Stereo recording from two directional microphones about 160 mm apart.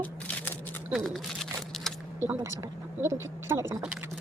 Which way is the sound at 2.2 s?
20° right (ahead or behind).